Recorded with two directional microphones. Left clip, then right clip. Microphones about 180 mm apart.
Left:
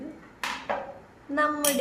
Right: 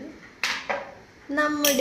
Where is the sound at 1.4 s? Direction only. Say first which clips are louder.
Right 2 dB; 25° right (ahead or behind).